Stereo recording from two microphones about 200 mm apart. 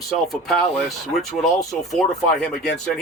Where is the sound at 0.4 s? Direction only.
Centre (ahead or behind).